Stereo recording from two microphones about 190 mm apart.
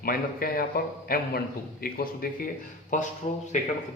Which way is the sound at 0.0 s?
50° left (ahead or behind).